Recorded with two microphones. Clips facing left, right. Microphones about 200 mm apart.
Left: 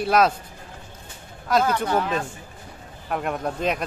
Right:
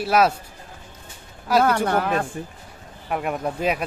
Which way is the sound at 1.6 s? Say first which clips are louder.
Right 2 dB; 60° right (ahead or behind).